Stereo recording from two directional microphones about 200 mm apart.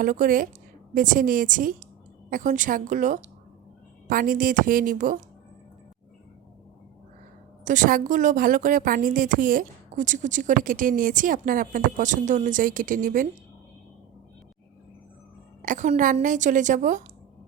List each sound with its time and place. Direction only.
0.0 s a woman's voice: 45° right (ahead or behind)
7.6 s a woman's voice: 40° right (ahead or behind)
15.6 s a woman's voice: 40° right (ahead or behind)